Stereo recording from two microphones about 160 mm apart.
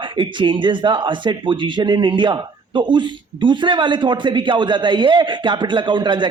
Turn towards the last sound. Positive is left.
turn(degrees=-30)  # may be behind; listen again after turning